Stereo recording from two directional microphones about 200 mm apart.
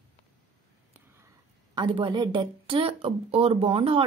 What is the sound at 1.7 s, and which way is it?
Speech, 25° right (ahead or behind).